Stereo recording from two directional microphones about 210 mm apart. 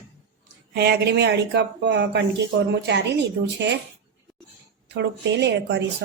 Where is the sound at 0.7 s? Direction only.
50° right (ahead or behind).